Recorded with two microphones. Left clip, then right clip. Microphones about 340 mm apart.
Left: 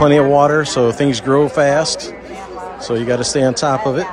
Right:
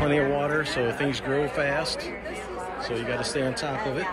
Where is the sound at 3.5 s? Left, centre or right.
Centre.